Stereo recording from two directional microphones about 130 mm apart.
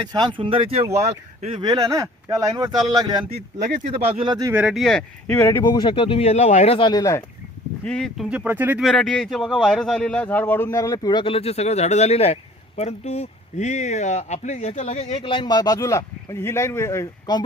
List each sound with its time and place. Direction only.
0.1 s speech: 35° right (ahead or behind)
4.5 s speech: 5° right (ahead or behind)
5.3 s speech: 20° left (ahead or behind)
5.7 s speech: 40° left (ahead or behind); by 6.7 s 60° left (ahead or behind)
6.7 s speech: 35° left (ahead or behind)
7.9 s speech: 5° left (ahead or behind)
8.3 s speech: 15° right (ahead or behind)
8.8 s speech: 5° left (ahead or behind); by 15.2 s 55° left (ahead or behind)
15.2 s speech: 40° left (ahead or behind); by 17.1 s 20° left (ahead or behind)